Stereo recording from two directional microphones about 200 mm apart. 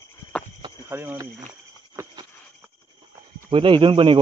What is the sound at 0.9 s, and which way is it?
Speech, 10° right (ahead or behind).